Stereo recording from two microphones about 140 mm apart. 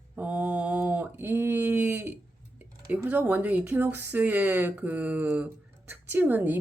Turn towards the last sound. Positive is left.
turn(degrees=-15)  # may be behind; listen again after turning